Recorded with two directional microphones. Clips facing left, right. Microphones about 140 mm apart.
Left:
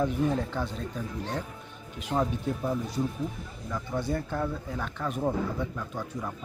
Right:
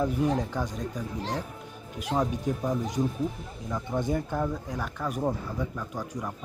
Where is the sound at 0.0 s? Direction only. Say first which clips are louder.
Right 1 dB; 10° right (ahead or behind).